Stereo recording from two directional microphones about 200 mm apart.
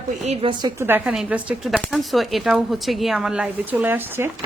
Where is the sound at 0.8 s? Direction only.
10° right (ahead or behind).